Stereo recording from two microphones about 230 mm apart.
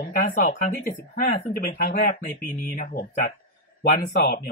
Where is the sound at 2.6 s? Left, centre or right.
Left.